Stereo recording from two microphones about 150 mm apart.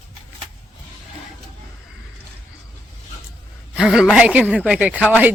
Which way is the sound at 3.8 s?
5° right (ahead or behind).